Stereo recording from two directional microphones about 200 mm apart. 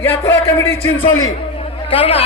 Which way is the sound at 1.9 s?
30° left (ahead or behind).